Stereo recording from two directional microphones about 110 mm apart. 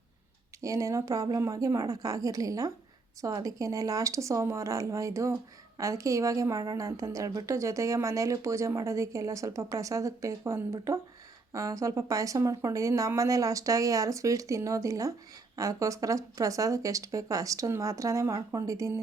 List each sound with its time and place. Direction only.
0.6 s speech: 30° right (ahead or behind)